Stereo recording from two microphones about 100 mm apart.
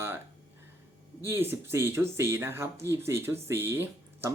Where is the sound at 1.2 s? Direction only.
25° right (ahead or behind).